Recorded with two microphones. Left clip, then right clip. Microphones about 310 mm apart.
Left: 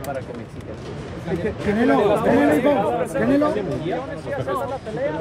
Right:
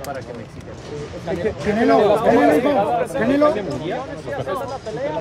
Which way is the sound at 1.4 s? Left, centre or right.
Right.